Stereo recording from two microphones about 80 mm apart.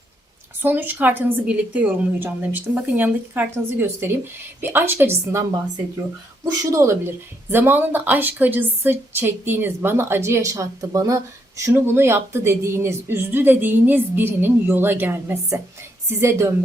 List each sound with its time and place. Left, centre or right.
0.6 s a woman's voice: right
7.5 s a woman's voice: right
10.5 s a woman's voice: right